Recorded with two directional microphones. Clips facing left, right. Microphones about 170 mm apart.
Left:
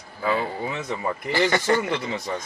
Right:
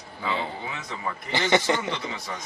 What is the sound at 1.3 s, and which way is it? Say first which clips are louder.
Speech: left 2 dB; 20° right (ahead or behind).